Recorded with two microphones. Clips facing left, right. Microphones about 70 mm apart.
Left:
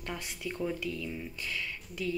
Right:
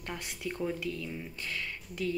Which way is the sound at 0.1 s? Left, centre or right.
Centre.